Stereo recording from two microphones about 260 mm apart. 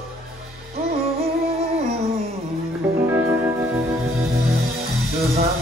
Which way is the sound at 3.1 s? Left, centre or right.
Centre.